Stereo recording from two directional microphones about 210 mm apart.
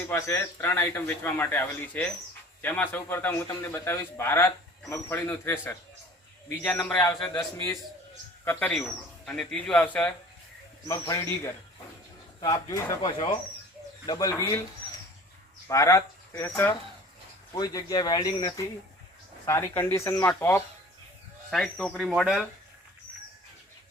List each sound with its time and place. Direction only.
0.1 s speech: 15° left (ahead or behind)
15.6 s speech: 15° left (ahead or behind)
17.5 s speech: 15° left (ahead or behind); by 22.4 s centre (ahead or behind)